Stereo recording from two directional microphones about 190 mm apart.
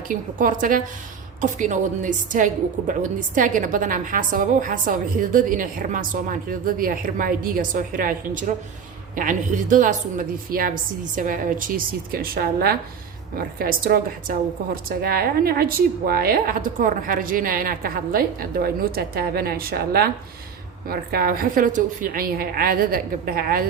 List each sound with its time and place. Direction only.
0.1 s a woman's voice: 45° right (ahead or behind)